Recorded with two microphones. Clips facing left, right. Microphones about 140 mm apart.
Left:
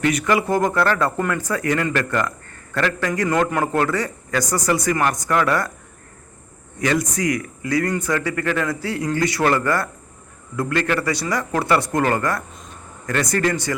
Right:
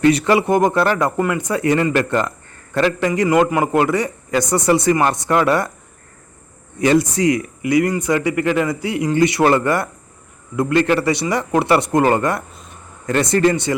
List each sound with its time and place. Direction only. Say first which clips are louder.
0.0 s speech: right 5 dB; 30° right (ahead or behind)
6.8 s speech: right 6 dB; 30° right (ahead or behind)